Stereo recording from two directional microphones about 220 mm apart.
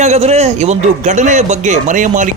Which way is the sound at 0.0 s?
30° right (ahead or behind).